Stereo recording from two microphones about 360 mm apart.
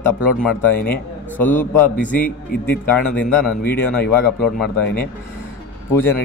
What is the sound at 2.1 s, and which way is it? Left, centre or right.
Speech, left.